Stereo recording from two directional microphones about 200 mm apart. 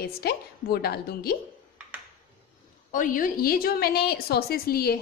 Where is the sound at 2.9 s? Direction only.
40° left (ahead or behind).